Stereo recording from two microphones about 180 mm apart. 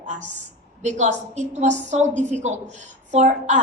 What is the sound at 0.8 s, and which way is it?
A woman's voice, 40° right (ahead or behind).